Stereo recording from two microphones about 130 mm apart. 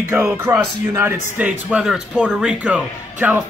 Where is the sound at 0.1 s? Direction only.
10° right (ahead or behind).